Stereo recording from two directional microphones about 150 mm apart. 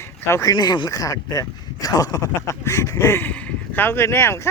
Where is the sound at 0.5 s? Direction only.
30° left (ahead or behind).